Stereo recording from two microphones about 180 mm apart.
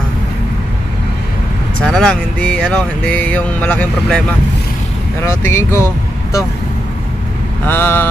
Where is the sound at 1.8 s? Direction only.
5° left (ahead or behind).